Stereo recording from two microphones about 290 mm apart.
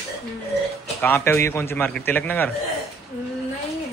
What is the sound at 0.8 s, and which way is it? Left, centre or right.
A man's voice, centre.